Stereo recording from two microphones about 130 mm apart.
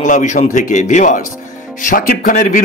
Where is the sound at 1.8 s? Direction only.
85° left.